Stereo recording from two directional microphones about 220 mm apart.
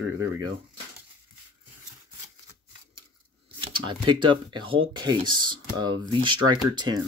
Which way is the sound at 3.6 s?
25° right (ahead or behind).